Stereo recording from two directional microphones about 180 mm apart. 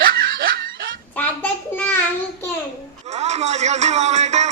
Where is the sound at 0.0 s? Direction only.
55° right (ahead or behind).